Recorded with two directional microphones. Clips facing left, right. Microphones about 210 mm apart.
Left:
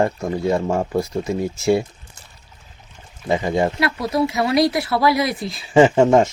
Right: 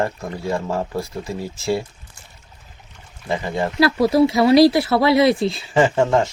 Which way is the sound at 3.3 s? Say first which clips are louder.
Left 4 dB; 20° left (ahead or behind).